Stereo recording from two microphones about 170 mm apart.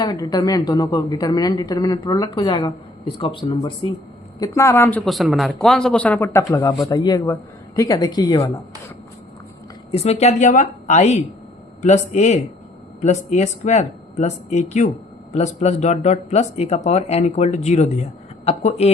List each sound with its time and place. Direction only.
0.0 s a woman's voice: 25° left (ahead or behind)
4.4 s a woman's voice: 20° left (ahead or behind)
9.9 s speech: 40° left (ahead or behind)